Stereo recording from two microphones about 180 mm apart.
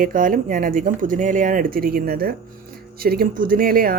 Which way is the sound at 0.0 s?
50° right (ahead or behind).